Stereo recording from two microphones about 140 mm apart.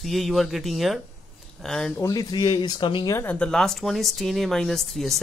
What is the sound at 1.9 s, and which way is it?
Speech, 25° left (ahead or behind).